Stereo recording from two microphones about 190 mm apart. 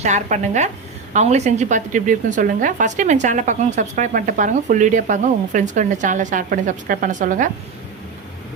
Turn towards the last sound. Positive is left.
turn(degrees=-40)  # may be behind; listen again after turning